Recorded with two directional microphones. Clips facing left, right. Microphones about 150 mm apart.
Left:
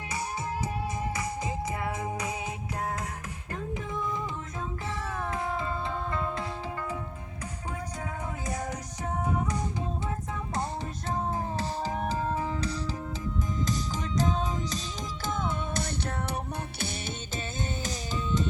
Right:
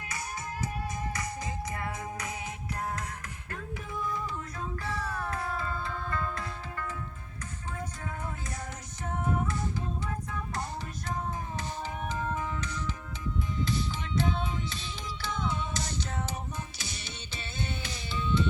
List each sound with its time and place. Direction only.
1.1 s music: 25° left (ahead or behind)
5.1 s music: 20° left (ahead or behind)
11.1 s music: 30° left (ahead or behind); by 16.9 s 60° left (ahead or behind)
17.8 s music: 40° left (ahead or behind)